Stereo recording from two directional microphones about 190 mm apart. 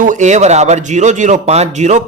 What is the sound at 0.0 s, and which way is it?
Speech, 40° right (ahead or behind).